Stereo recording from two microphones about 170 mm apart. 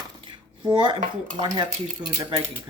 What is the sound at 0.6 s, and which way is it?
Speech, 25° right (ahead or behind).